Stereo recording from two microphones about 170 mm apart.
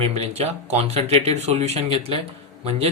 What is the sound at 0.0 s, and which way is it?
Speech, 40° right (ahead or behind).